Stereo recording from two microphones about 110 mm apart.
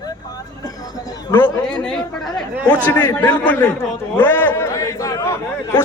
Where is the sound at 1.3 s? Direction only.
30° left (ahead or behind).